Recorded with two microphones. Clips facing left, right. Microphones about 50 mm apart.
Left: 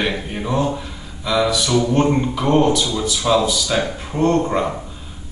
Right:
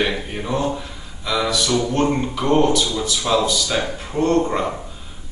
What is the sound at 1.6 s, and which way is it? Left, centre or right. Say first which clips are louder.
Speech: left 2 dB; centre.